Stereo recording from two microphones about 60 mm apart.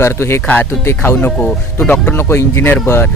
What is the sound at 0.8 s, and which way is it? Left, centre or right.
Speech, left.